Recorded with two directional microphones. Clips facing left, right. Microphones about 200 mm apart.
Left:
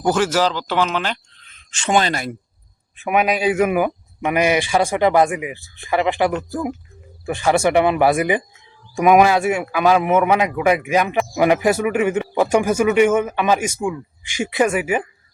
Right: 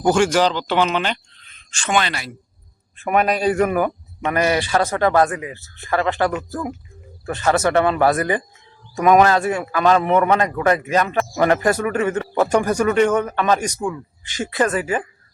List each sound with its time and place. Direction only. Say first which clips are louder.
0.0 s speech: right 2 dB; 5° left (ahead or behind)
1.9 s speech: left 3 dB; 40° left (ahead or behind)
3.0 s a man's voice: even; 5° left (ahead or behind)